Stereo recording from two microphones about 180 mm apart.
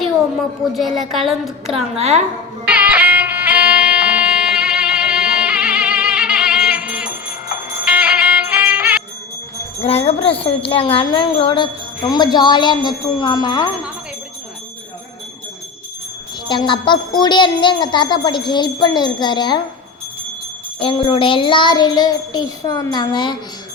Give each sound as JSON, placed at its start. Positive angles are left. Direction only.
{"t": 0.0, "sound": "a woman's voice", "side_deg": 0}
{"t": 1.7, "sound": "a woman's voice", "side_deg": -35}
{"t": 2.6, "sound": "music", "side_deg": -5}
{"t": 9.8, "sound": "wind chime", "side_deg": 35}
{"t": 16.5, "sound": "wind chime", "side_deg": 25}
{"t": 20.7, "sound": "wind chime", "side_deg": 30}